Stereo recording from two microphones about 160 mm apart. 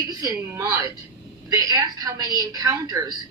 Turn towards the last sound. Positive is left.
turn(degrees=-25)  # may be behind; listen again after turning